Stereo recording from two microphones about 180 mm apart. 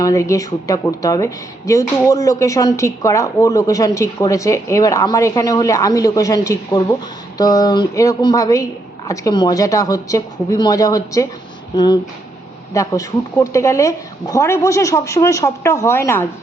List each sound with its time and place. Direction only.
0.0 s a woman's voice: 15° left (ahead or behind)